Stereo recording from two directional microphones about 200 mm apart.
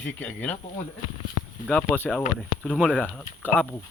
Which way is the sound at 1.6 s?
5° left (ahead or behind).